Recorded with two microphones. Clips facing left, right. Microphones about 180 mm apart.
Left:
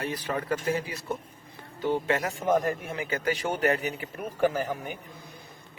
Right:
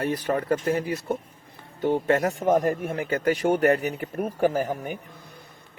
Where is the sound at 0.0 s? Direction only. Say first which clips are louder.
Right 6 dB; 50° right (ahead or behind).